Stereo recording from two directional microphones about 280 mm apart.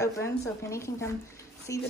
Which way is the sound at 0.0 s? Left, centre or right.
Centre.